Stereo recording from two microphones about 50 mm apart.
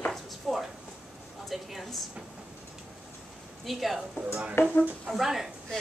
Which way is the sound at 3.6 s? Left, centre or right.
Centre.